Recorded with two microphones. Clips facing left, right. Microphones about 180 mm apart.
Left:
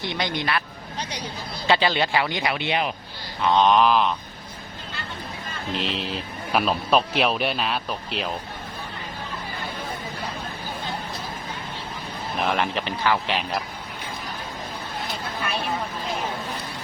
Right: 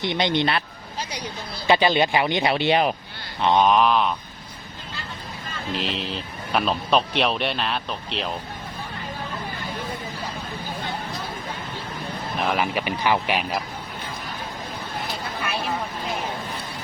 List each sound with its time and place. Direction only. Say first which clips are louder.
0.0 s speech: right 5 dB; 20° right (ahead or behind)
1.6 s speech: right 3 dB; 15° right (ahead or behind); by 2.9 s 40° right (ahead or behind)
3.6 s speech: left 1 dB; centre (ahead or behind)
5.7 s speech: even; centre (ahead or behind)
12.4 s speech: even; 5° right (ahead or behind)